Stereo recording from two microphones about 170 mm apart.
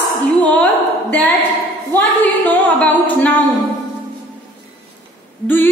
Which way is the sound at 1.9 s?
10° left (ahead or behind).